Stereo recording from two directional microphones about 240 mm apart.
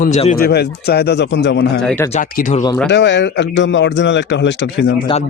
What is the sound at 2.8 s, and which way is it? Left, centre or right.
Speech, left.